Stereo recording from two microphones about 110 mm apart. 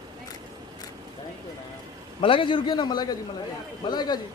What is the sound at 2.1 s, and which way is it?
A man's voice, 55° left (ahead or behind).